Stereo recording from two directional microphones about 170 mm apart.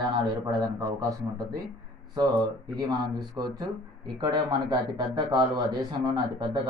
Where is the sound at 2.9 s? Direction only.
25° right (ahead or behind).